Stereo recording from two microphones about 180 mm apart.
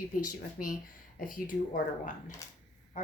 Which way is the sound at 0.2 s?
50° left (ahead or behind).